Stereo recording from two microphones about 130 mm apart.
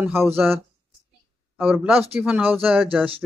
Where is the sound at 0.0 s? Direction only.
15° right (ahead or behind).